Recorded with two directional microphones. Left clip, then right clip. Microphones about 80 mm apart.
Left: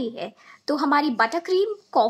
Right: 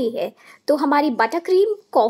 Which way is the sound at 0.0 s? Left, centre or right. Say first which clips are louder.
Right 8 dB; right.